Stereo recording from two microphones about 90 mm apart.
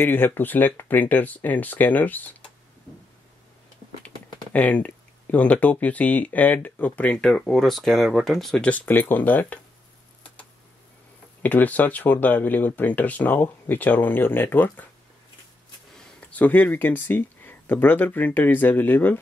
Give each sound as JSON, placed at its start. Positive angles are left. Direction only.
{"t": 0.0, "sound": "speech", "side_deg": 25}
{"t": 4.0, "sound": "speech", "side_deg": 15}
{"t": 8.6, "sound": "speech", "side_deg": 20}
{"t": 11.4, "sound": "speech", "side_deg": 20}
{"t": 16.0, "sound": "speech", "side_deg": 15}